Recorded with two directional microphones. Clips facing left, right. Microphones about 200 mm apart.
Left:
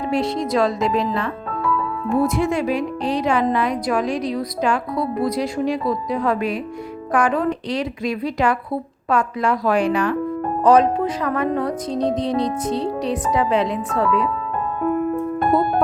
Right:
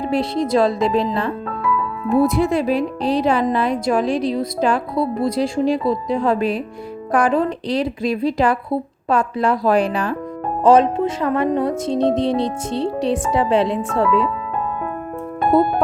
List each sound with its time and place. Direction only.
0.0 s a woman's voice: 30° right (ahead or behind)
2.2 s a woman's voice: 35° right (ahead or behind)